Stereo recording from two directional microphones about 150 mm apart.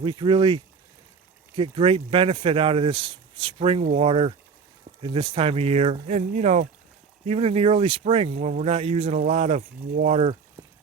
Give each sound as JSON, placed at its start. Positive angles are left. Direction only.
{"t": 0.0, "sound": "speech", "side_deg": -30}